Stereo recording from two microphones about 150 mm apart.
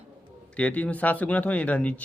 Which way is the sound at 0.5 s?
10° left (ahead or behind).